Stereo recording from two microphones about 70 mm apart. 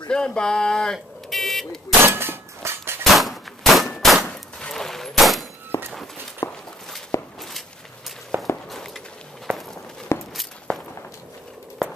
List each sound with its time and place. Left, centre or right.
0.1 s speech: centre
0.9 s buzzer: centre
2.0 s a sound: right
3.0 s gunshot: centre
4.3 s fusillade: centre
5.7 s walk: left
8.3 s walk: right
8.6 s walk: centre
10.1 s walk: left